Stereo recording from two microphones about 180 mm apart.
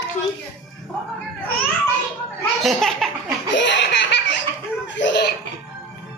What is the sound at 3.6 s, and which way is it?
Laughter, 80° left.